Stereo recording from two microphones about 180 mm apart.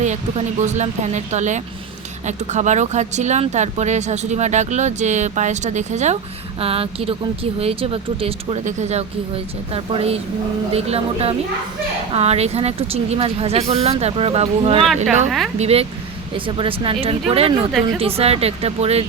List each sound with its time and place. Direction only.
0.0 s speech: 40° right (ahead or behind)